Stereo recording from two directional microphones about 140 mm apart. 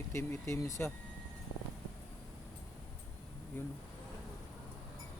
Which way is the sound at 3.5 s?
15° left (ahead or behind).